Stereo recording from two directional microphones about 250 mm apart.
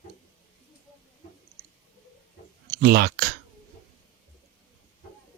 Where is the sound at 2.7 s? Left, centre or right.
Right.